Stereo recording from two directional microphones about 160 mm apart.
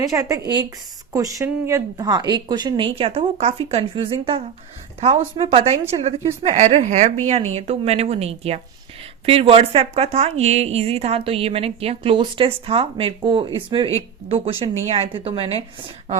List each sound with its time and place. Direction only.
0.0 s a woman's voice: 20° right (ahead or behind)
14.4 s a woman's voice: 40° right (ahead or behind)